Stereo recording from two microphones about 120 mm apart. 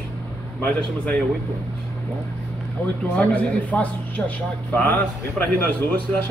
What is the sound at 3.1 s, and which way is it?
A man's voice, 10° left (ahead or behind).